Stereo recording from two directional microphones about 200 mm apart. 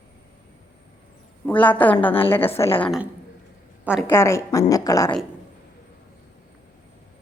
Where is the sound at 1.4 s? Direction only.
10° left (ahead or behind).